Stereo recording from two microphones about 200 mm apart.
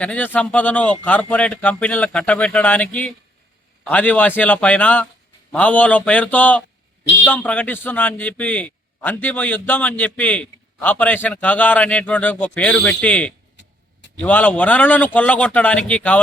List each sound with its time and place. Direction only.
0.0 s a man's voice: 10° left (ahead or behind)
7.0 s a sound: 65° left (ahead or behind)
7.3 s a man's voice: 10° left (ahead or behind)